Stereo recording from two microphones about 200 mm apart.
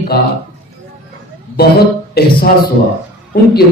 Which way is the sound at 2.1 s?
50° left (ahead or behind).